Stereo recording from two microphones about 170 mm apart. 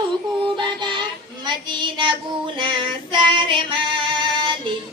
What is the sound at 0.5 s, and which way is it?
Music, 25° right (ahead or behind).